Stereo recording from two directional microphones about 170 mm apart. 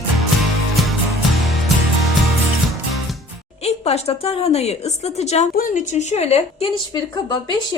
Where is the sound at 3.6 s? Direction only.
35° left (ahead or behind).